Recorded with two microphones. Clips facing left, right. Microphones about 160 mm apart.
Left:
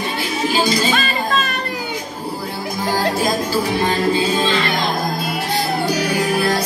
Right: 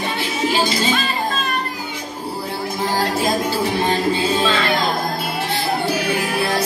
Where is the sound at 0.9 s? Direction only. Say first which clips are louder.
Left 2 dB; 75° left (ahead or behind).